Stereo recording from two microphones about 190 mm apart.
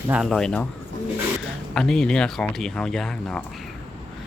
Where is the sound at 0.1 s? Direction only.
Centre (ahead or behind).